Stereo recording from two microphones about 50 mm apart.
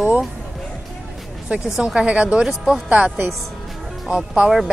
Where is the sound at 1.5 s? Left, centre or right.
Right.